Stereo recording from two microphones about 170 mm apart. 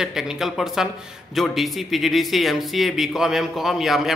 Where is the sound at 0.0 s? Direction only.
5° right (ahead or behind).